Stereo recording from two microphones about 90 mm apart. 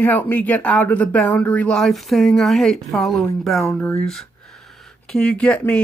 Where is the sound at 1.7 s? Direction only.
Centre (ahead or behind).